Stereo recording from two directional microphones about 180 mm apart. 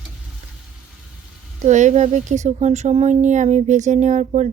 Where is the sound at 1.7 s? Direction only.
40° right (ahead or behind).